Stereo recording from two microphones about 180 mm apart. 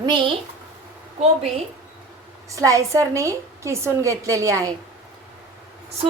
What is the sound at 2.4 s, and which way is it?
A woman's voice, 20° right (ahead or behind).